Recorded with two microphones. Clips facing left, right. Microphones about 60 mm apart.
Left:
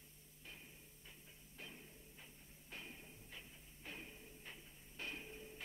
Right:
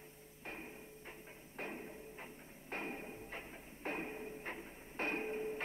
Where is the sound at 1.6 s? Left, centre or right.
Right.